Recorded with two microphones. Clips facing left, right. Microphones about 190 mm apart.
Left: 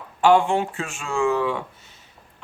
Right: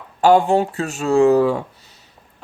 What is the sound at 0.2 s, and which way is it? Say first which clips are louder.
Speech: right 4 dB; 40° right (ahead or behind).